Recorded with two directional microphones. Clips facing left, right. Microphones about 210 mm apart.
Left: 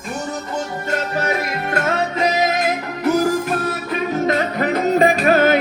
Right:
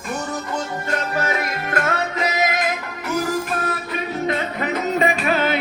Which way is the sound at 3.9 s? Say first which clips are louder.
Left 6 dB; 40° left (ahead or behind).